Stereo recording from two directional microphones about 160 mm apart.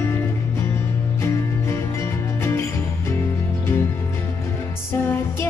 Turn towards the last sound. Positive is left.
turn(degrees=15)  # may be behind; listen again after turning